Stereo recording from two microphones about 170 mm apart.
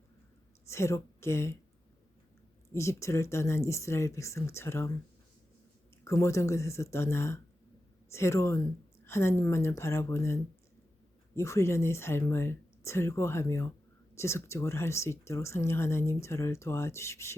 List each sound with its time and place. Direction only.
0.7 s a woman's voice: 15° left (ahead or behind)
2.7 s speech: 15° left (ahead or behind)
6.1 s speech: 15° left (ahead or behind)